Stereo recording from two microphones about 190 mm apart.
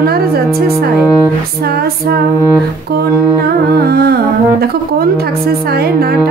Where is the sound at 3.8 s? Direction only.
55° right (ahead or behind).